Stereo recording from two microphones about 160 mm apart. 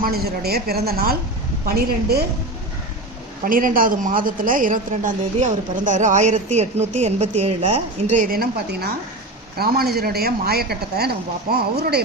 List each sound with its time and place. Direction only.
0.0 s a woman's voice: 75° right (ahead or behind)
3.4 s a woman's voice: 60° right (ahead or behind); by 8.2 s 45° right (ahead or behind)
8.3 s a woman's voice: 75° right (ahead or behind)